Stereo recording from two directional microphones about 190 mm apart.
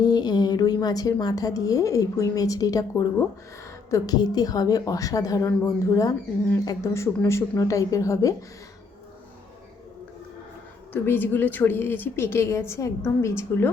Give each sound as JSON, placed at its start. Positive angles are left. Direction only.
{"t": 0.0, "sound": "a woman's voice", "side_deg": 20}
{"t": 3.8, "sound": "a woman's voice", "side_deg": 15}
{"t": 10.9, "sound": "a woman's voice", "side_deg": 10}